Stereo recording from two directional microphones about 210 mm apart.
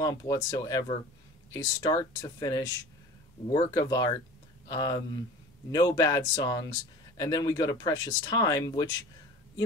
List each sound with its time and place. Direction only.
0.0 s speech: 15° left (ahead or behind)